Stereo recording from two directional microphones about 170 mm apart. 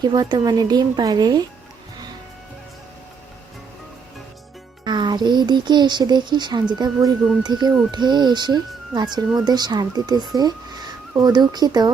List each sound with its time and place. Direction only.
0.0 s a child's voice: 25° right (ahead or behind)
4.9 s a child's voice: 25° right (ahead or behind)